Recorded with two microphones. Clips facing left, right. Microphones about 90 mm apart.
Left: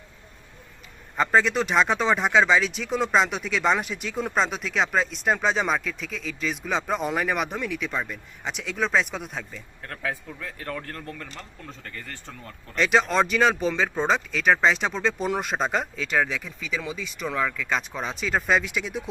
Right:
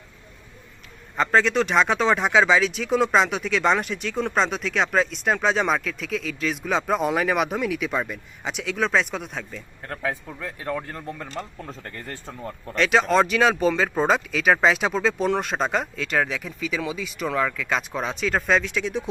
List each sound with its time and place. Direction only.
1.1 s speech: centre (ahead or behind)
9.9 s speech: 20° right (ahead or behind)
12.7 s speech: centre (ahead or behind)